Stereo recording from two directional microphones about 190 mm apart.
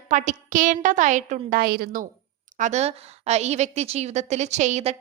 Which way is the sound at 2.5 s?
40° right (ahead or behind).